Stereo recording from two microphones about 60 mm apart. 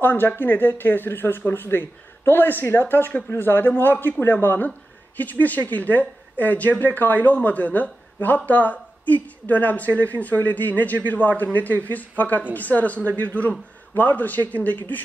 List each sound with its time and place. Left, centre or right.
0.0 s a woman's voice: left